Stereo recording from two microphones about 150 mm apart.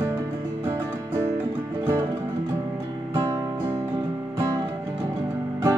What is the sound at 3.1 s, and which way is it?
Music, 25° right (ahead or behind).